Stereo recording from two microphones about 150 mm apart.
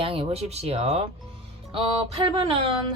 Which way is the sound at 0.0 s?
35° right (ahead or behind).